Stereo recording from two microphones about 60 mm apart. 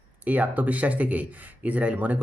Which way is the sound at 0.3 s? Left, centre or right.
Right.